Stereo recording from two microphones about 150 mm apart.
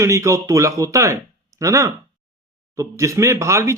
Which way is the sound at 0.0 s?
20° right (ahead or behind).